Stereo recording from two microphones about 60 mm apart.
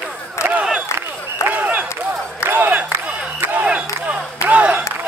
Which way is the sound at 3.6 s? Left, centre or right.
Centre.